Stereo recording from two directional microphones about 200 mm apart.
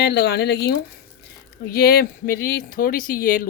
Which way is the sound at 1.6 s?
50° left (ahead or behind).